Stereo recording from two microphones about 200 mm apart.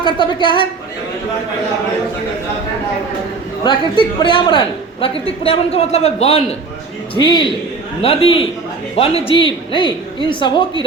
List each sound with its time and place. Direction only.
0.0 s a man's voice: 25° left (ahead or behind)
3.6 s a man's voice: 20° left (ahead or behind)